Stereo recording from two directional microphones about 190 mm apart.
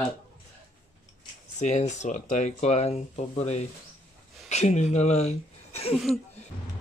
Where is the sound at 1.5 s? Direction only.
40° left (ahead or behind).